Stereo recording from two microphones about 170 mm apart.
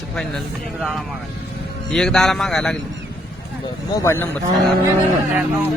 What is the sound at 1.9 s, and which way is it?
Speech, 5° left (ahead or behind).